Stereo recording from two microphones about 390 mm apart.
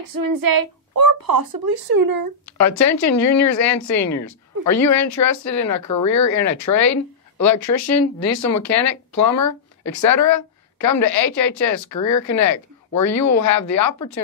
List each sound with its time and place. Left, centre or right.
0.1 s child singing: right
1.2 s speech: right
2.4 s speech: left